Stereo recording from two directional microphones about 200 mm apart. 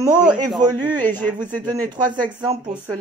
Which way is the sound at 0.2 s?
5° right (ahead or behind).